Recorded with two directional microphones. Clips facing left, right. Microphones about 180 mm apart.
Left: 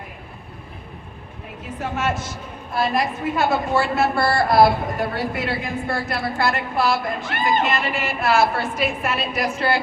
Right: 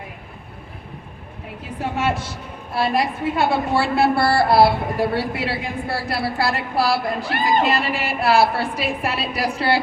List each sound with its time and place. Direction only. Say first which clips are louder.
1.8 s a woman's voice: right 2 dB; 30° right (ahead or behind)